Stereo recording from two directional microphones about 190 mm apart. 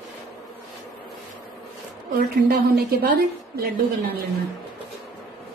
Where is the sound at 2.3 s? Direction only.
60° right (ahead or behind).